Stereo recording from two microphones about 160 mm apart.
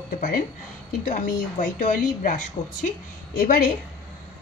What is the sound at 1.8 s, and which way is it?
Speech, 55° left (ahead or behind).